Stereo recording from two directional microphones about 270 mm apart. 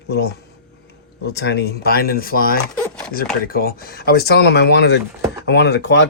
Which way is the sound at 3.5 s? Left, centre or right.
Left.